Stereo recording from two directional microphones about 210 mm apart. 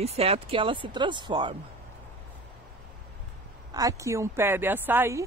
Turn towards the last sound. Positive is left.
turn(degrees=-10)  # may be behind; listen again after turning